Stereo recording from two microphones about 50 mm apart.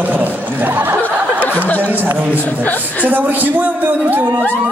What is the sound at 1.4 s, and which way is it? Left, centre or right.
Speech, left.